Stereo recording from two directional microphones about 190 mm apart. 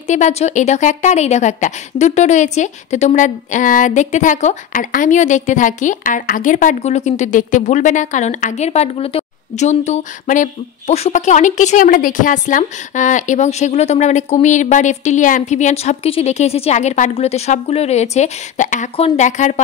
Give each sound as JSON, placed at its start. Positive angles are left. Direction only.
{"t": 0.0, "sound": "a woman's voice", "side_deg": 40}